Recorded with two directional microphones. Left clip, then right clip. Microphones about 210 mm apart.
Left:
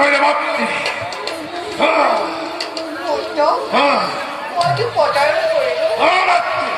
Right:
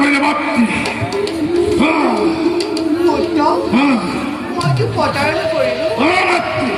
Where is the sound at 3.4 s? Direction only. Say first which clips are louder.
Left 3 dB; 55° right (ahead or behind).